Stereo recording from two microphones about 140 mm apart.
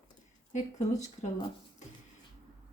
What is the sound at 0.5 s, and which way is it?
Speech, 55° left (ahead or behind).